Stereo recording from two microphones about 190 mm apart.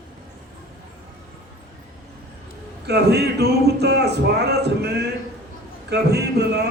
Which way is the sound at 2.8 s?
60° right (ahead or behind).